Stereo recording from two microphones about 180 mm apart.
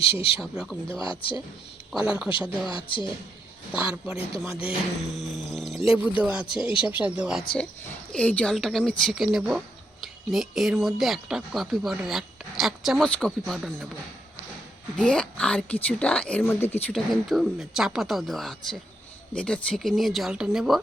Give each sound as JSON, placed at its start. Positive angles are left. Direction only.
{"t": 0.0, "sound": "speech", "side_deg": 30}
{"t": 0.4, "sound": "speech", "side_deg": 0}
{"t": 0.9, "sound": "speech", "side_deg": 30}
{"t": 1.9, "sound": "speech", "side_deg": -5}
{"t": 2.6, "sound": "speech", "side_deg": 25}
{"t": 3.7, "sound": "speech", "side_deg": -5}
{"t": 14.9, "sound": "speech", "side_deg": 5}
{"t": 16.9, "sound": "speech", "side_deg": 0}